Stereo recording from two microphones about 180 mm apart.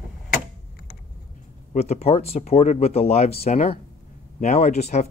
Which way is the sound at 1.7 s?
35° left (ahead or behind).